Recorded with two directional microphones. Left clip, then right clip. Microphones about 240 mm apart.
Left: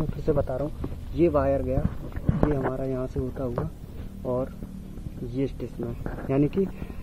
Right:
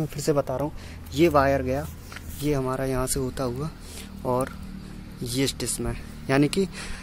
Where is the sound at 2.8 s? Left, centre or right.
Centre.